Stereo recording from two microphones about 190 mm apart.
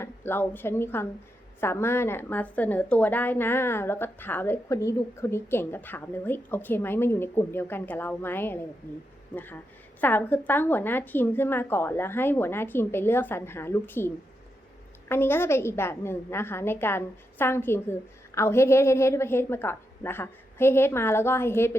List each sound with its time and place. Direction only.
0.0 s a woman's voice: 10° left (ahead or behind)
15.1 s a woman's voice: 10° left (ahead or behind)